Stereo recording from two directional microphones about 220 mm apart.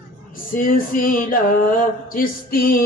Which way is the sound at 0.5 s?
40° left (ahead or behind).